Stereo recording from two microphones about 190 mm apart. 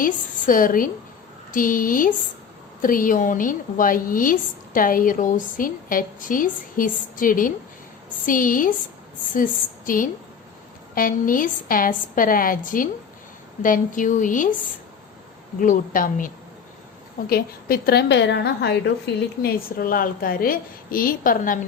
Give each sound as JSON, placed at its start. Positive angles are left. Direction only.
{"t": 0.0, "sound": "a woman's voice", "side_deg": 45}
{"t": 15.6, "sound": "a woman's voice", "side_deg": 45}